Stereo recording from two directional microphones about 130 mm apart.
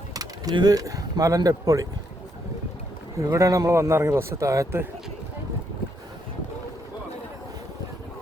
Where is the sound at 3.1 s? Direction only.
25° right (ahead or behind).